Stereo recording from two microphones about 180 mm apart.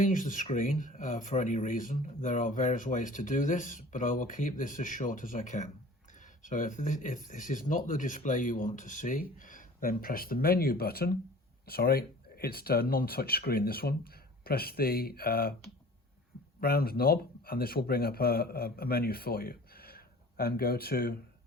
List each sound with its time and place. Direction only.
0.0 s speech: 45° left (ahead or behind)
16.6 s speech: 55° left (ahead or behind)